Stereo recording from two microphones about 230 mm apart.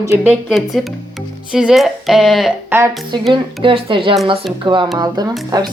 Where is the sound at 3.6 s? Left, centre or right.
Right.